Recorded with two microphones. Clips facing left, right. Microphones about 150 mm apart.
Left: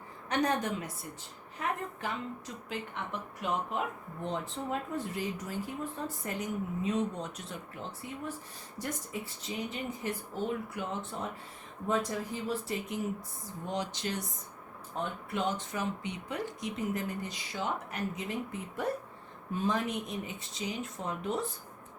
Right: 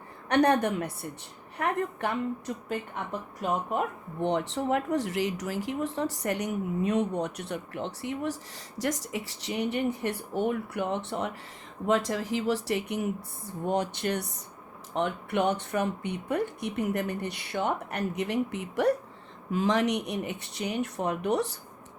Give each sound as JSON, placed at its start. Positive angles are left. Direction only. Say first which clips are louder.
{"t": 0.3, "sound": "speech", "louder": "right 7 dB", "side_deg": -65}
{"t": 2.6, "sound": "speech", "louder": "right 3 dB", "side_deg": -50}
{"t": 4.2, "sound": "speech", "louder": "right 8 dB", "side_deg": -75}
{"t": 11.9, "sound": "speech", "louder": "right 5 dB", "side_deg": -90}
{"t": 13.7, "sound": "speech", "louder": "right 7 dB", "side_deg": -55}